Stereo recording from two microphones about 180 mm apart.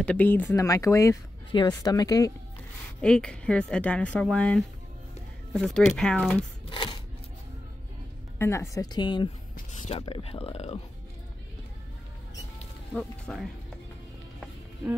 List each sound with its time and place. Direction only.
0.0 s speech: 10° left (ahead or behind)
3.0 s speech: 5° left (ahead or behind)
6.7 s a sound: 30° left (ahead or behind)
8.4 s speech: 15° left (ahead or behind)
9.7 s speech: 40° left (ahead or behind)
12.9 s speech: 5° left (ahead or behind)